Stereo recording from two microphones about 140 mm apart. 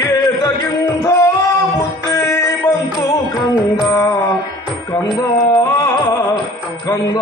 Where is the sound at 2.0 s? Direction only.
25° left (ahead or behind).